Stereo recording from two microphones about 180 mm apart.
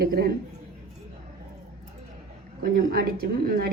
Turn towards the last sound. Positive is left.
turn(degrees=-55)  # may be behind; listen again after turning